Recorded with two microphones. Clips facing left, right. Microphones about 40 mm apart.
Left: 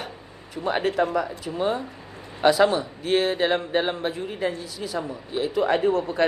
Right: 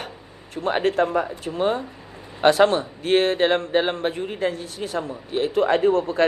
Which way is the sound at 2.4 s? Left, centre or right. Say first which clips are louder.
Right 2 dB; right.